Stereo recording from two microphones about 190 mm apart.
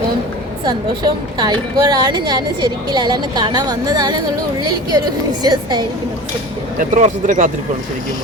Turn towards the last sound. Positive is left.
turn(degrees=-45)  # may be behind; listen again after turning